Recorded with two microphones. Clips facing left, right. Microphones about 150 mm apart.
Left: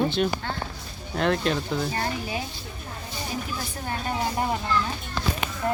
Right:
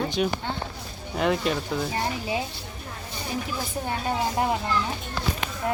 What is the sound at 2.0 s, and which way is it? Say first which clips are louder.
Speech: right 1 dB; 25° right (ahead or behind).